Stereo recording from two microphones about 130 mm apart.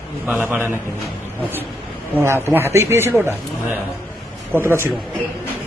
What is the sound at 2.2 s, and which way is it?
Speech, 20° right (ahead or behind).